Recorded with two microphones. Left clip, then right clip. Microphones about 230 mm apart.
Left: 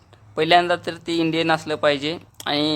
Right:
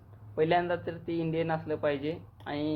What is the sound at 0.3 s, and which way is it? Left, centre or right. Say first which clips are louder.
A man's voice: left 10 dB; left.